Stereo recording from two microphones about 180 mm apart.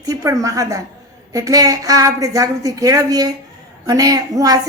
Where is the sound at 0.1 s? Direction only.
20° right (ahead or behind).